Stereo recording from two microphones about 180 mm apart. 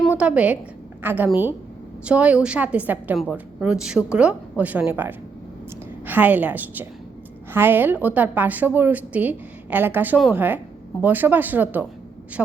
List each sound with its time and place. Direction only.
0.2 s a woman's voice: 5° right (ahead or behind)